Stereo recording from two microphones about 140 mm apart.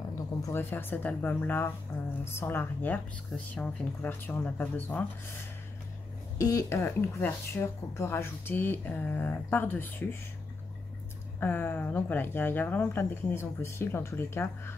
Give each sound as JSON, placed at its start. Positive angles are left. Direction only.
{"t": 0.4, "sound": "speech", "side_deg": 15}
{"t": 6.3, "sound": "speech", "side_deg": 25}
{"t": 11.3, "sound": "speech", "side_deg": 15}